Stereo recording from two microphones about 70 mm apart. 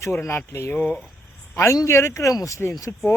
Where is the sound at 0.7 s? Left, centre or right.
Centre.